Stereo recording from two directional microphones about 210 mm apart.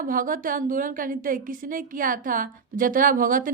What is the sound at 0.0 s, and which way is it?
A woman's voice, 40° right (ahead or behind).